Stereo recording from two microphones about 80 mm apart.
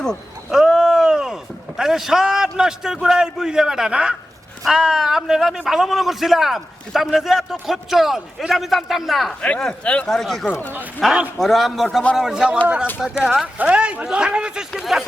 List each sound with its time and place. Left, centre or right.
0.5 s a sound: centre
4.6 s a man's voice: centre
9.4 s a man's voice: centre